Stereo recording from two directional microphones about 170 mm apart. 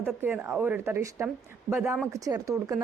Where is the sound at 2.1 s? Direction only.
20° right (ahead or behind).